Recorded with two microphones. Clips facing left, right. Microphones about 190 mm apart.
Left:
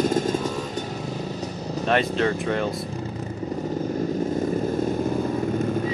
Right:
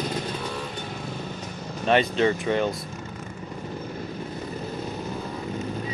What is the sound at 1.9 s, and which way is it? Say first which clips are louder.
Speech: right 1 dB; centre (ahead or behind).